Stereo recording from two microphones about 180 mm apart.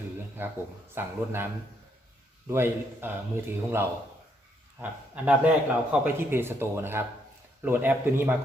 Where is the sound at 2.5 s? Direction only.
15° right (ahead or behind).